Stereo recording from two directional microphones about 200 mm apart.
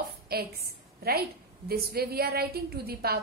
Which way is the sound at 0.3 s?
50° right (ahead or behind).